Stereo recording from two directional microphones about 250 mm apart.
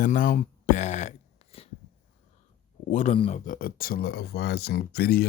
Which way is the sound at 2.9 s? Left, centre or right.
Left.